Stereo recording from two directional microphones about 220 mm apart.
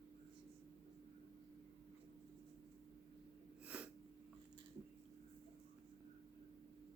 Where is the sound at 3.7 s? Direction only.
5° right (ahead or behind).